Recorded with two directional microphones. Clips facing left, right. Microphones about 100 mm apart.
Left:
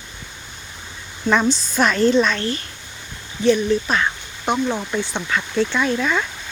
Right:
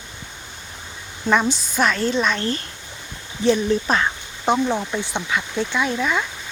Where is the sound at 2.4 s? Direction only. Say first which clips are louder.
Even; 35° right (ahead or behind).